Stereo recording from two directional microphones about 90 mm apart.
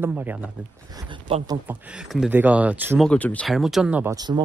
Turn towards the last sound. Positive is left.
turn(degrees=-45)  # may be behind; listen again after turning